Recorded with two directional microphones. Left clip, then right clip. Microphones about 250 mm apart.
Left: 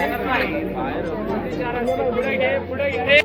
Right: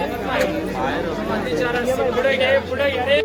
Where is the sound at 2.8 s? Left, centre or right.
Right.